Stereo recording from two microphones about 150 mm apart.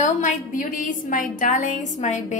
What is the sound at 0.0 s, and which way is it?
A woman's voice, 55° left (ahead or behind).